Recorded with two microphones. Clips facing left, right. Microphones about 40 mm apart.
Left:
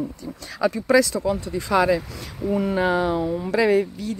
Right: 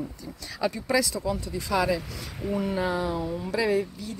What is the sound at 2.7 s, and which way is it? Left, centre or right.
Speech, left.